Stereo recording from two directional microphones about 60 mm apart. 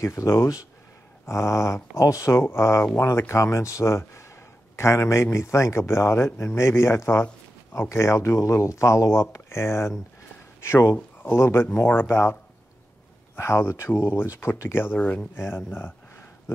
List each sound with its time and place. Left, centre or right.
0.0 s speech: left
2.4 s a man's voice: left
13.4 s a man's voice: left
15.0 s speech: left
15.3 s speech: left